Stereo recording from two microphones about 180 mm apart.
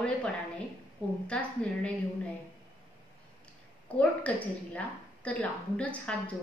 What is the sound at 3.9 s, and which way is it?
A woman's voice, 5° left (ahead or behind).